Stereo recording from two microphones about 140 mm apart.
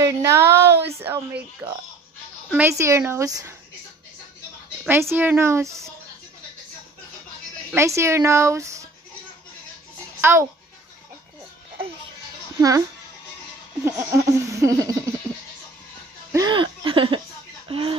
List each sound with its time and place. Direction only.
0.0 s a sound: 20° right (ahead or behind)
1.0 s a woman's voice: 15° right (ahead or behind)
2.8 s laughter: 20° right (ahead or behind)
4.8 s laughter: 15° right (ahead or behind)
7.7 s laughter: 20° right (ahead or behind)
10.2 s a woman's voice: 15° right (ahead or behind)
12.5 s speech: 25° right (ahead or behind)
13.8 s laughter: 20° right (ahead or behind)
16.3 s a sound: 25° right (ahead or behind)
16.5 s a sound: 40° right (ahead or behind)
17.6 s speech: 40° right (ahead or behind)